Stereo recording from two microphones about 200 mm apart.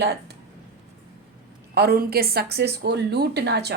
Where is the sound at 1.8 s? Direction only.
50° right (ahead or behind).